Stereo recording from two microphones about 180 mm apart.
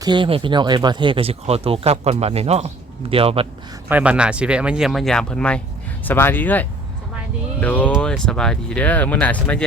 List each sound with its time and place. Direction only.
0.0 s speech: 25° right (ahead or behind)
3.8 s speech: 10° right (ahead or behind); by 9.6 s 10° left (ahead or behind)